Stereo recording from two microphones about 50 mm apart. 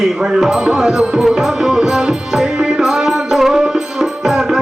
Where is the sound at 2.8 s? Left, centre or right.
Centre.